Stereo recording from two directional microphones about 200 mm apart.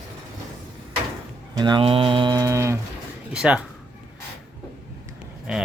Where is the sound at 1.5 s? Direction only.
20° right (ahead or behind); by 3.7 s 5° right (ahead or behind).